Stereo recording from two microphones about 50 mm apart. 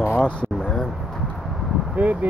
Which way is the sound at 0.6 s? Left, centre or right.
Centre.